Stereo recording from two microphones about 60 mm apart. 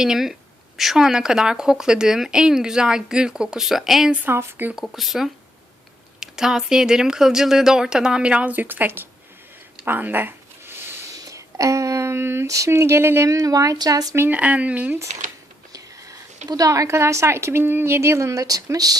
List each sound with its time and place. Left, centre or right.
0.0 s speech: centre
4.3 s speech: right
4.7 s speech: centre; by 9.0 s right
9.8 s a sound: right
11.1 s a sound: right
12.5 s speech: right
13.2 s speech: right
14.3 s speech: right
15.7 s a woman's voice: right